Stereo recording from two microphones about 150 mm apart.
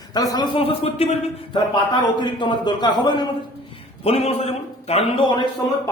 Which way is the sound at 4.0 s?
40° left (ahead or behind).